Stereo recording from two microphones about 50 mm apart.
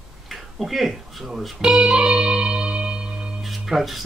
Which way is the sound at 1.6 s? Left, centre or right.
Centre.